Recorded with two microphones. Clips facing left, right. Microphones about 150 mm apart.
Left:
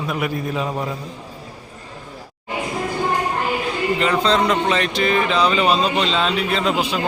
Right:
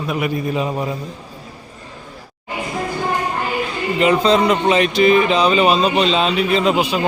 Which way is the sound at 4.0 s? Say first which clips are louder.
Right 5 dB; 15° right (ahead or behind).